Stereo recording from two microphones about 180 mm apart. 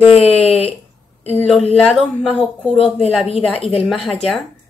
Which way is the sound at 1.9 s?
5° left (ahead or behind).